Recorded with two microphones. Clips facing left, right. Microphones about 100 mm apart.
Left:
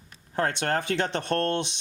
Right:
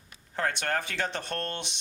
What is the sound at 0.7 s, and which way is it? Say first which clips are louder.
Speech: left 5 dB; 20° left (ahead or behind).